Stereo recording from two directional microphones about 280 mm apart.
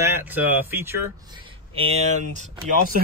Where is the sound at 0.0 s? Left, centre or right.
Centre.